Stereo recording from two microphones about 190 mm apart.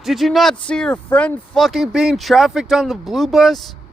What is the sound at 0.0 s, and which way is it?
Speech, centre (ahead or behind).